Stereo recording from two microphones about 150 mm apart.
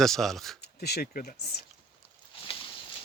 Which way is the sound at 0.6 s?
90° left.